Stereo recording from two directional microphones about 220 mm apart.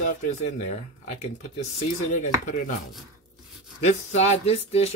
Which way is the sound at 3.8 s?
30° left (ahead or behind).